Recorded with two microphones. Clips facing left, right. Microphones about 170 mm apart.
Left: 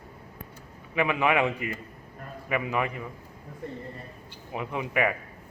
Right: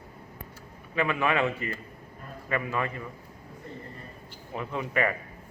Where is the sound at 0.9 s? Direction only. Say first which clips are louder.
Left 2 dB; 15° left (ahead or behind).